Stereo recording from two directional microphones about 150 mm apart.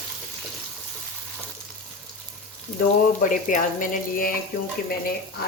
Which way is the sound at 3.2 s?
60° left (ahead or behind).